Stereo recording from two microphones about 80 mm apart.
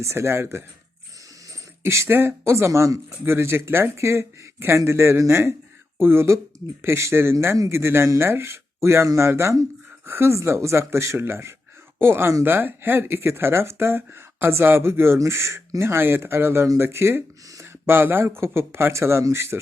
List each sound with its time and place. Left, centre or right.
0.0 s speech: right
1.8 s speech: right